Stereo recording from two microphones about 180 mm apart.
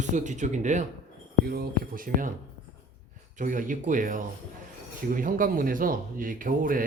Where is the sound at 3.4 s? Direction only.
45° right (ahead or behind).